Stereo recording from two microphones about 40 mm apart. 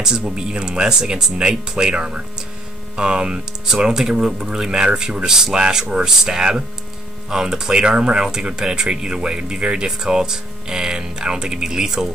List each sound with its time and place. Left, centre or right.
0.4 s speech: right